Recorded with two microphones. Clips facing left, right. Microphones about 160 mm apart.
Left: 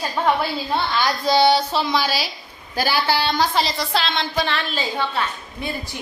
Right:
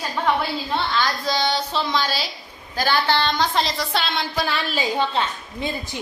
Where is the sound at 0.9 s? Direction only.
15° left (ahead or behind).